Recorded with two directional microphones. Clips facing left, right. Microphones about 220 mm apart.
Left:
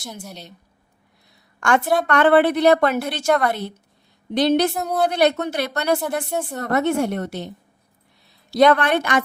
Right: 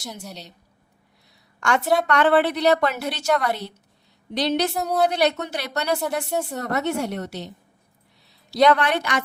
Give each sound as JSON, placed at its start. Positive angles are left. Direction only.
{"t": 1.6, "sound": "a woman's voice", "side_deg": 50}
{"t": 4.7, "sound": "a woman's voice", "side_deg": 0}
{"t": 5.0, "sound": "a woman's voice", "side_deg": 50}
{"t": 6.3, "sound": "a woman's voice", "side_deg": 0}
{"t": 6.6, "sound": "a woman's voice", "side_deg": 50}